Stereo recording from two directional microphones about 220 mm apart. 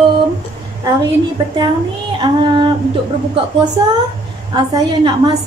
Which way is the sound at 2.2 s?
20° right (ahead or behind).